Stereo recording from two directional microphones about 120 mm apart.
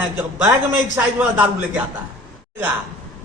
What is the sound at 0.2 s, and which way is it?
A man's voice, 15° right (ahead or behind).